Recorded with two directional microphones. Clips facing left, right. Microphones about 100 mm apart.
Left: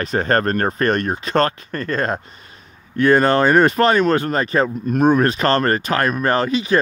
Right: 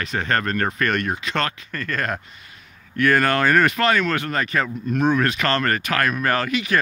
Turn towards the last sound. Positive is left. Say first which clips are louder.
# left 4 dB
turn(degrees=30)  # may be behind; listen again after turning